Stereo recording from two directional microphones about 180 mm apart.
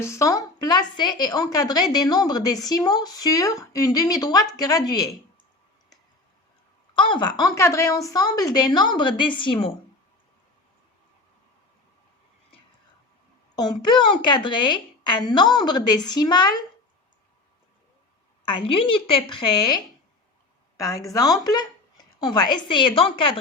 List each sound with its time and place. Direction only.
0.0 s a woman's voice: 15° left (ahead or behind)
6.9 s a woman's voice: 25° left (ahead or behind)
13.6 s a woman's voice: 25° left (ahead or behind)
18.4 s a woman's voice: 30° left (ahead or behind)